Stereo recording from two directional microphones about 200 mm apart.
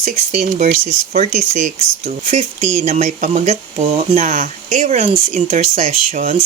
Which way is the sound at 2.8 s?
35° right (ahead or behind).